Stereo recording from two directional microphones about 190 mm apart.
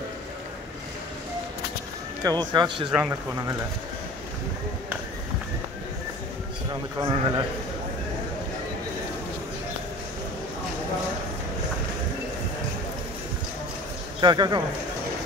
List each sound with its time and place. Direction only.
2.2 s a man's voice: 20° right (ahead or behind)
6.7 s a man's voice: 20° right (ahead or behind)
14.2 s a man's voice: 25° right (ahead or behind)